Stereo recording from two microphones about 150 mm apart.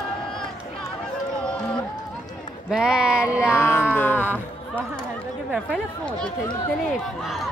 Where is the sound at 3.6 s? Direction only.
15° left (ahead or behind).